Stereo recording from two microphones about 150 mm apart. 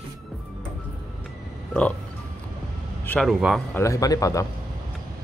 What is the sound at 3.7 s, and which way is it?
Speech, 20° left (ahead or behind).